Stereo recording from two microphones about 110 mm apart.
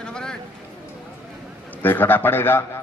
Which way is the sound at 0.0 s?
5° left (ahead or behind).